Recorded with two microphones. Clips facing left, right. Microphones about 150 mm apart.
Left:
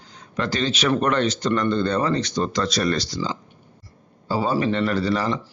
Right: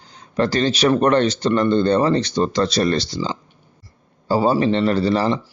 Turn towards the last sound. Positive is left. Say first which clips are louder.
# right 4 dB
turn(degrees=-30)  # may be behind; listen again after turning